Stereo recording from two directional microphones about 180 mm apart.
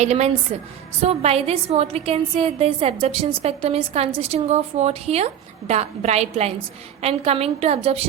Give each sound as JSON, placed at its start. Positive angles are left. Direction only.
{"t": 0.0, "sound": "a woman's voice", "side_deg": -40}